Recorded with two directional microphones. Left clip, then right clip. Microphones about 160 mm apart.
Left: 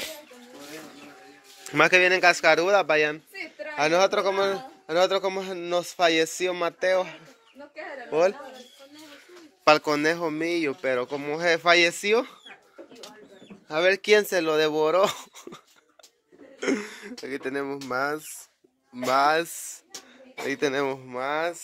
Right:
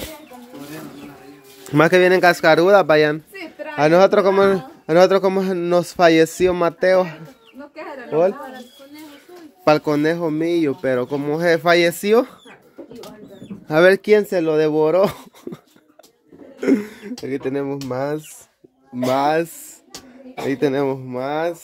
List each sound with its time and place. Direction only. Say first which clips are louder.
1.7 s a man's voice: right 5 dB; 25° right (ahead or behind)
9.7 s speech: right 4 dB; 5° right (ahead or behind); by 12.3 s 25° right (ahead or behind)
14.0 s speech: right 5 dB; 5° right (ahead or behind)
19.2 s speech: right 4 dB; 10° right (ahead or behind)